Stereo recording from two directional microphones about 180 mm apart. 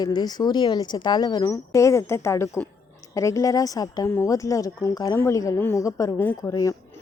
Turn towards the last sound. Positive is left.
turn(degrees=20)  # may be behind; listen again after turning